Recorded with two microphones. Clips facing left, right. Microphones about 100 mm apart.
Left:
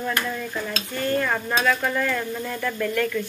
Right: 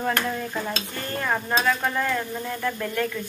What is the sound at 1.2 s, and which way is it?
Speech, 15° right (ahead or behind).